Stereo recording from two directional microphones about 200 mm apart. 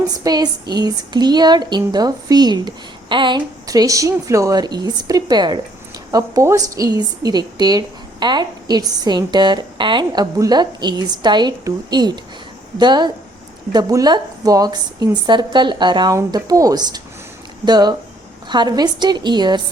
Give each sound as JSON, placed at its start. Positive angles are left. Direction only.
{"t": 0.1, "sound": "a woman's voice", "side_deg": -20}